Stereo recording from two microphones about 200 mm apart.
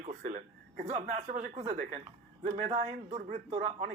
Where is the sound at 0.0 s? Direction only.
40° right (ahead or behind).